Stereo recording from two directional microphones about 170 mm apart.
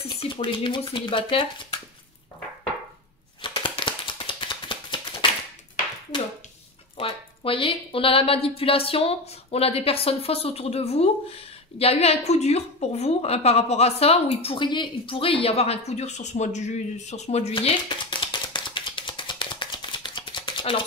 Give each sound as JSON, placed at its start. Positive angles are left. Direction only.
{"t": 0.2, "sound": "speech", "side_deg": 30}
{"t": 3.4, "sound": "a sound", "side_deg": 30}
{"t": 7.0, "sound": "a woman's voice", "side_deg": 30}